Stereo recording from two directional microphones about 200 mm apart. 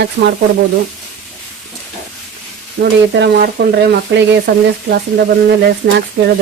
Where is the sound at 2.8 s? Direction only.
70° right (ahead or behind).